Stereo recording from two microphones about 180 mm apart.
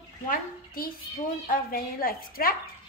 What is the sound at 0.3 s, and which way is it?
A woman's voice, 55° left (ahead or behind).